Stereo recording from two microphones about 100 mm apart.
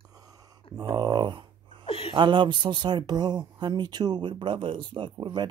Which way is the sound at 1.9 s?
70° left (ahead or behind).